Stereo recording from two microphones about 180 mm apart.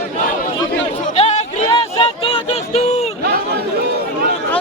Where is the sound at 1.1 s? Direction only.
35° left (ahead or behind).